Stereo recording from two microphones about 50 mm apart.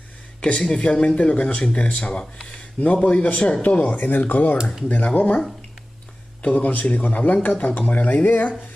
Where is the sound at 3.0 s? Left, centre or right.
Left.